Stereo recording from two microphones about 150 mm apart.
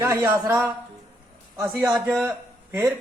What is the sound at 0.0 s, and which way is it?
A man's voice, 20° right (ahead or behind).